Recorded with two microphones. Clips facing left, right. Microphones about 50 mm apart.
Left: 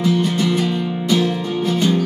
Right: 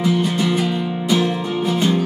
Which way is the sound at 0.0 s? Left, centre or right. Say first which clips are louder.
Left 1 dB; centre.